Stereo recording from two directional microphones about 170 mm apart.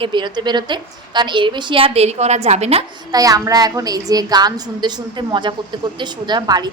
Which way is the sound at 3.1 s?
20° right (ahead or behind).